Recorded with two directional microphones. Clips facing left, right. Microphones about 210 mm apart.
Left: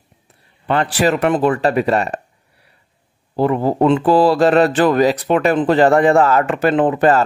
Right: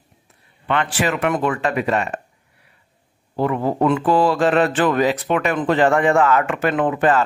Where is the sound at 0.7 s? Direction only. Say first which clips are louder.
Left 5 dB; 35° left (ahead or behind).